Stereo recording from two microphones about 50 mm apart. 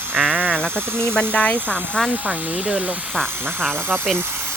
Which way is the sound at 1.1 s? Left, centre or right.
Left.